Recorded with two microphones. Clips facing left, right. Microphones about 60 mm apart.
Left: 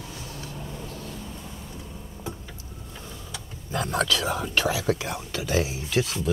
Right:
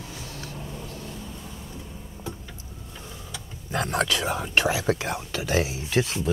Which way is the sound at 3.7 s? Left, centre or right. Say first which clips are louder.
Even; right.